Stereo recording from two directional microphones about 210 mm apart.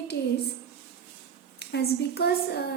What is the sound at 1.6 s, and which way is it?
A woman's voice, 50° left (ahead or behind).